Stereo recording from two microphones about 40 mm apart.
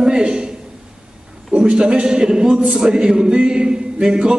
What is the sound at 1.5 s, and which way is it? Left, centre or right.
A man's voice, right.